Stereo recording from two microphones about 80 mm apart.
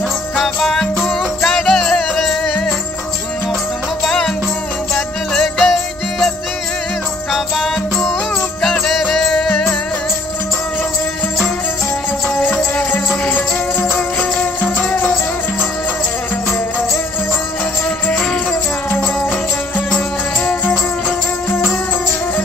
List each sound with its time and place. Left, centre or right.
0.4 s music: centre
4.0 s music: centre
5.3 s music: centre
7.3 s music: centre
12.4 s music: centre
14.4 s music: centre
18.1 s music: centre